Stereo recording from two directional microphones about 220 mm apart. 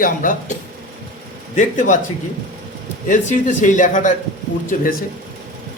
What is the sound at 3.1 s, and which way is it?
Speech, 35° left (ahead or behind).